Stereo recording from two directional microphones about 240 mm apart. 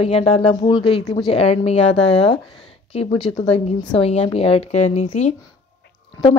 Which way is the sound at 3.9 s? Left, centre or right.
Left.